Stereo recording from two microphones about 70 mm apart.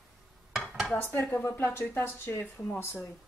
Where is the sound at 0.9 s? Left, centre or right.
Left.